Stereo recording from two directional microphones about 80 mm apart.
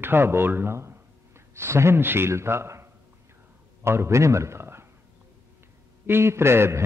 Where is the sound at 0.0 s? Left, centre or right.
Right.